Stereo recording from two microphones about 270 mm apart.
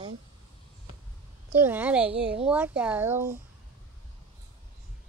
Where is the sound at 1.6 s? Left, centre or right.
Centre.